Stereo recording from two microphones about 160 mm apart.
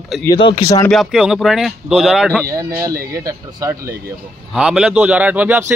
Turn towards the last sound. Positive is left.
turn(degrees=-10)  # may be behind; listen again after turning